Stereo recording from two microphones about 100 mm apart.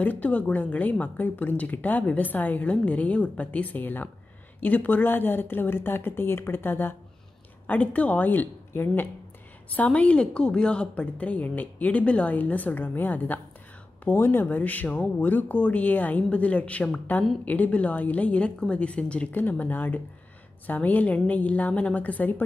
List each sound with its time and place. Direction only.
0.0 s a woman's voice: 15° left (ahead or behind)